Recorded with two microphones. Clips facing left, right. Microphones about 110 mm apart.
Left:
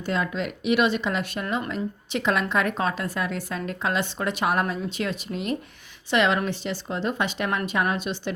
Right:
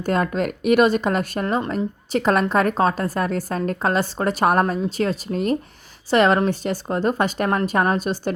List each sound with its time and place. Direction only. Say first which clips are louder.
0.0 s a woman's voice: right 6 dB; 50° right (ahead or behind)